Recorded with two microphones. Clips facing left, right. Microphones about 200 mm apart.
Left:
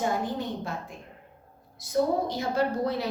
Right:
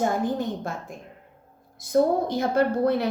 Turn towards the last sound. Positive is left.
turn(degrees=-55)  # may be behind; listen again after turning